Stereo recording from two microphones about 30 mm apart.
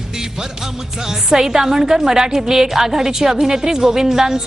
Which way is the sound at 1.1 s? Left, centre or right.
Centre.